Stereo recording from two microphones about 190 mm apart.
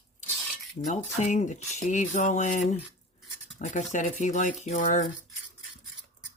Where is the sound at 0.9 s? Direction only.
40° left (ahead or behind).